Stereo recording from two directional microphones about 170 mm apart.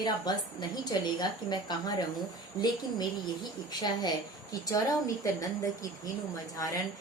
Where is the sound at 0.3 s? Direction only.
25° left (ahead or behind).